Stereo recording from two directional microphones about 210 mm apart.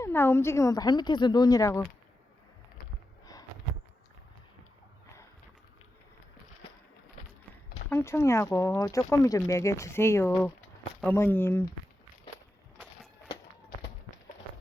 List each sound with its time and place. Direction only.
0.0 s speech: 10° left (ahead or behind)
7.9 s speech: 10° left (ahead or behind)